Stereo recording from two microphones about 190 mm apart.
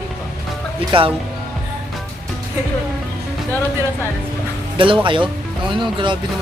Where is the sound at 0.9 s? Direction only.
25° right (ahead or behind).